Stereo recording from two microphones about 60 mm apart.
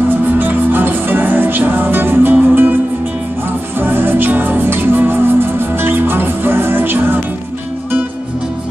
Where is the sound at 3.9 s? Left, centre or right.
Right.